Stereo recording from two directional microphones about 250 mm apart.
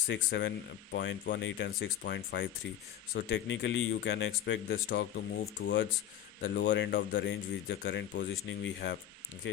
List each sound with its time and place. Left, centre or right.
0.1 s speech: left